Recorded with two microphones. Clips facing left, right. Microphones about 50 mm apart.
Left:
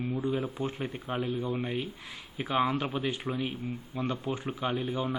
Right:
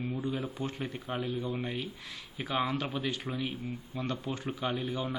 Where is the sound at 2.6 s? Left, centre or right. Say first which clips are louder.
Left 3 dB; left.